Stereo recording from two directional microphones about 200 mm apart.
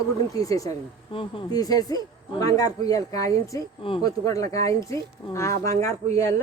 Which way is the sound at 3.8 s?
25° left (ahead or behind).